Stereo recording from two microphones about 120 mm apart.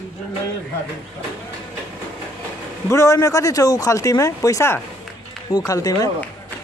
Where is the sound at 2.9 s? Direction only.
25° left (ahead or behind).